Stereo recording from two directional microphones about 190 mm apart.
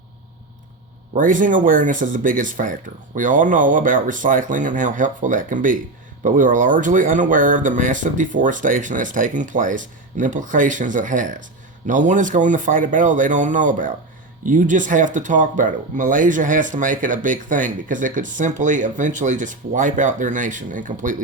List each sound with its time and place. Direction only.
1.1 s speech: 45° right (ahead or behind)